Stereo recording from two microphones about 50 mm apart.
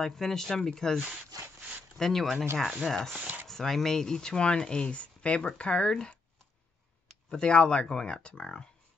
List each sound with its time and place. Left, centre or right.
0.0 s speech: centre
3.2 s speech: right
3.4 s speech: centre
7.2 s speech: centre